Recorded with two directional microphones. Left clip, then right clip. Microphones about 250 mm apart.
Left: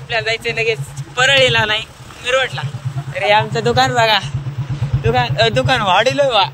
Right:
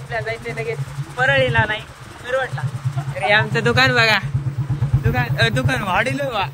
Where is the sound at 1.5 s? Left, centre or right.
Left.